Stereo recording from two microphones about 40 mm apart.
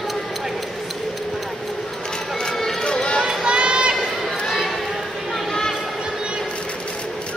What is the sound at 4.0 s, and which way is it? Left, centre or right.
Run, centre.